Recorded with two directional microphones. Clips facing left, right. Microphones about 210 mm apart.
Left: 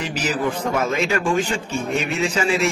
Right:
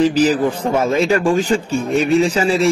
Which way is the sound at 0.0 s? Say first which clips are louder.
Right 9 dB; 35° right (ahead or behind).